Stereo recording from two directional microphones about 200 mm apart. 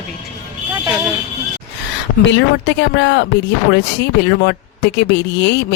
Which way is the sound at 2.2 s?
65° left (ahead or behind).